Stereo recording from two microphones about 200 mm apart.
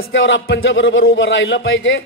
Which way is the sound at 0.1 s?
65° left (ahead or behind).